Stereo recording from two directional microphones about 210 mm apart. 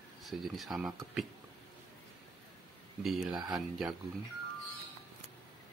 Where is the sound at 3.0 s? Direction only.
Centre (ahead or behind).